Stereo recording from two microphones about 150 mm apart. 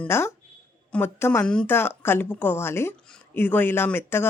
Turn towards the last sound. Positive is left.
turn(degrees=15)  # may be behind; listen again after turning